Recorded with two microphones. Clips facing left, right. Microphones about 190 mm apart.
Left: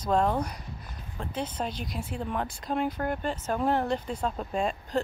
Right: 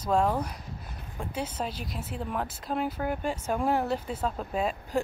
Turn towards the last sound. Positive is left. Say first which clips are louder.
# even
turn(degrees=-5)  # may be behind; listen again after turning